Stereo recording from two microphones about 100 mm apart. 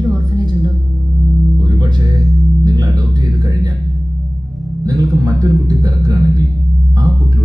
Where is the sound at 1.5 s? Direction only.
50° right (ahead or behind).